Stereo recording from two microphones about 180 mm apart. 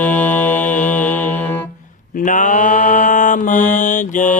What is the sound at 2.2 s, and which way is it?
Mantra, 45° left (ahead or behind).